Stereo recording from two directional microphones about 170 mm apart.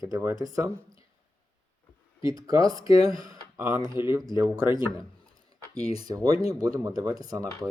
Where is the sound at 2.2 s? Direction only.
20° right (ahead or behind).